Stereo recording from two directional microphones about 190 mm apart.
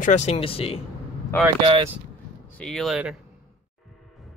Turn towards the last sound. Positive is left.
turn(degrees=0)  # may be behind; listen again after turning